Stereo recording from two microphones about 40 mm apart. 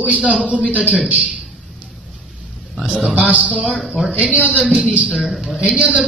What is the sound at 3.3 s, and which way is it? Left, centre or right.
Speech, right.